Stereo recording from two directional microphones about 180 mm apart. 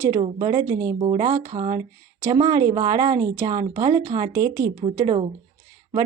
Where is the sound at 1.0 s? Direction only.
30° right (ahead or behind).